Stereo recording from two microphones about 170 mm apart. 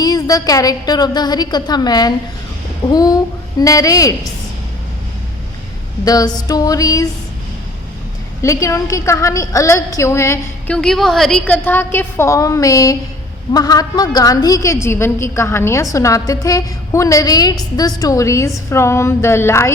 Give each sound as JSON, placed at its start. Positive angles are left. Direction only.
{"t": 0.0, "sound": "a woman's voice", "side_deg": 20}
{"t": 6.1, "sound": "a woman's voice", "side_deg": 25}
{"t": 8.4, "sound": "a woman's voice", "side_deg": 20}
{"t": 10.8, "sound": "a woman's voice", "side_deg": 5}